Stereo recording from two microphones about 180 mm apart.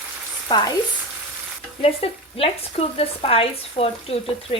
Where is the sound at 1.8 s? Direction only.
35° left (ahead or behind).